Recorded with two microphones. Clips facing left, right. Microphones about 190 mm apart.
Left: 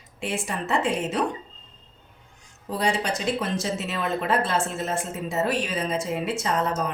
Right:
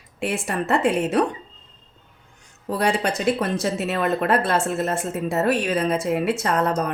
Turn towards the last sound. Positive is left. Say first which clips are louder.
# right 4 dB
turn(degrees=-60)  # may be behind; listen again after turning